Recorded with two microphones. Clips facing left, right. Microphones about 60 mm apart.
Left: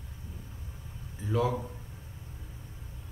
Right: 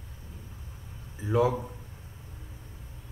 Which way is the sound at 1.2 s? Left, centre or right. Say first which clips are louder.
Right 4 dB; centre.